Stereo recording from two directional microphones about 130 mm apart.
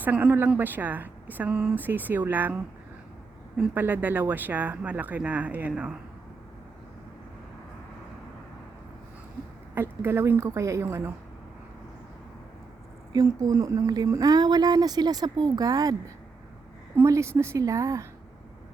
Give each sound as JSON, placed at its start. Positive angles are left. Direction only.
{"t": 0.0, "sound": "speech", "side_deg": -15}
{"t": 3.6, "sound": "speech", "side_deg": -15}
{"t": 9.7, "sound": "speech", "side_deg": -20}
{"t": 13.1, "sound": "speech", "side_deg": -25}
{"t": 17.0, "sound": "speech", "side_deg": -20}